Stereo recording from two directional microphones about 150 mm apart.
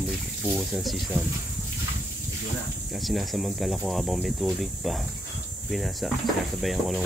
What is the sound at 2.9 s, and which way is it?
Speech, centre (ahead or behind).